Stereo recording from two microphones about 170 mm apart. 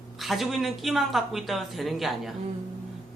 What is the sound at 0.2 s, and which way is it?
A man's voice, centre (ahead or behind).